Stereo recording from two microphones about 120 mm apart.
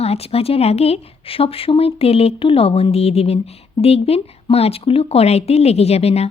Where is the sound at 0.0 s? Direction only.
60° left (ahead or behind).